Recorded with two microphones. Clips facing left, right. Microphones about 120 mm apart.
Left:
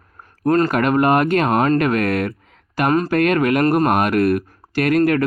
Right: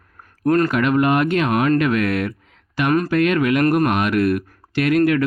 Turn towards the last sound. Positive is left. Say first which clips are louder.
# even
turn(degrees=45)  # may be behind; listen again after turning